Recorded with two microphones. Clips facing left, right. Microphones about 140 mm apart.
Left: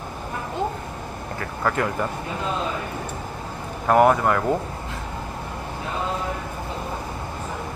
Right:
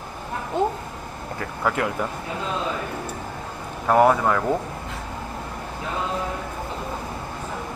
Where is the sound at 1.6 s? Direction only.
5° right (ahead or behind).